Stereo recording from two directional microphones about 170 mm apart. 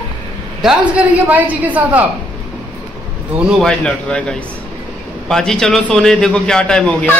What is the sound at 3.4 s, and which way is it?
A man's voice, 5° left (ahead or behind).